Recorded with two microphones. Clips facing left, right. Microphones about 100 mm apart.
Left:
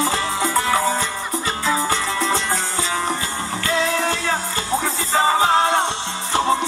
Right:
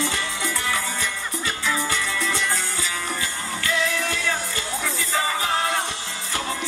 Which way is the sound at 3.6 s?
30° left (ahead or behind).